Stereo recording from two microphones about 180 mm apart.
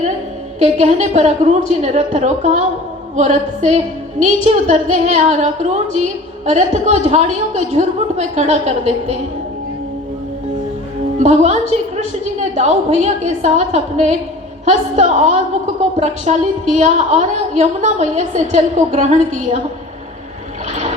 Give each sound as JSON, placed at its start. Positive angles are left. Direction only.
{"t": 0.6, "sound": "music", "side_deg": -40}
{"t": 11.2, "sound": "music", "side_deg": -40}